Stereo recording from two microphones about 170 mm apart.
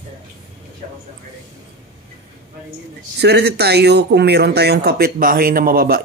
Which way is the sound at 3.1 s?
75° right (ahead or behind).